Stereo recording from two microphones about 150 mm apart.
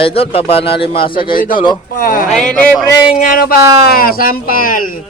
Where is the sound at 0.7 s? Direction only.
90° left.